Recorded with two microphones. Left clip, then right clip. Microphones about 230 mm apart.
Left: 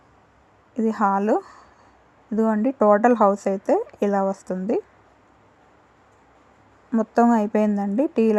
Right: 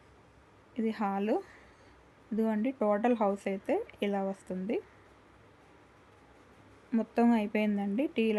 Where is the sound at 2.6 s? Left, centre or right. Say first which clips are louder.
Left 13 dB; centre.